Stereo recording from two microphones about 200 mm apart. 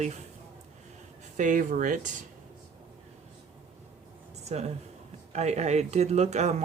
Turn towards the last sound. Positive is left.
turn(degrees=-35)  # may be behind; listen again after turning